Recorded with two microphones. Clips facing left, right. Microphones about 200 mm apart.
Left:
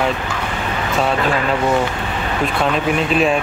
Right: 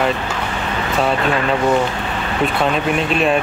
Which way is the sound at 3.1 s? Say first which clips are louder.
Left 1 dB; centre (ahead or behind).